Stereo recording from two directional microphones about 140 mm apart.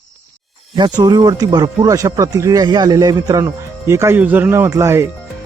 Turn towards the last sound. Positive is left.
turn(degrees=-20)  # may be behind; listen again after turning